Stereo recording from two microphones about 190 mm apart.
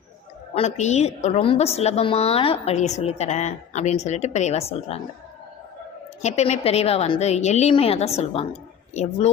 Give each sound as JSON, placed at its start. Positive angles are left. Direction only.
{"t": 0.5, "sound": "a woman's voice", "side_deg": 35}
{"t": 6.2, "sound": "a woman's voice", "side_deg": 35}